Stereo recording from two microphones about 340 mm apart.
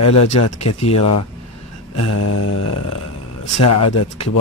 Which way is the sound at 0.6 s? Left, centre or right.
Centre.